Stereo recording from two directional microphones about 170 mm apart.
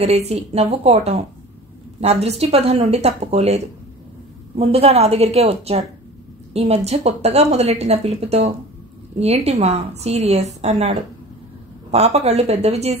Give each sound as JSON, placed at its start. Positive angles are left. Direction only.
{"t": 0.0, "sound": "a woman's voice", "side_deg": -40}